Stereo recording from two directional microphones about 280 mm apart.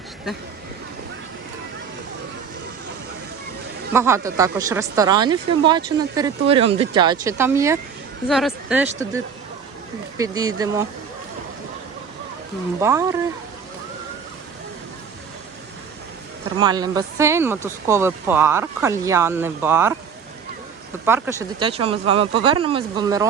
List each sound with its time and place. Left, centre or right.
3.9 s speech: centre
10.2 s speech: centre
12.8 s speech: centre
16.6 s speech: centre
21.0 s speech: centre